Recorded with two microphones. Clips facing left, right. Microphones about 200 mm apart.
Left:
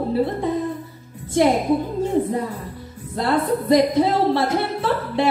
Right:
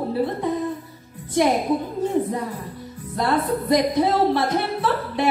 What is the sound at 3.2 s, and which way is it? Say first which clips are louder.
Speech: left 2 dB; 25° left (ahead or behind).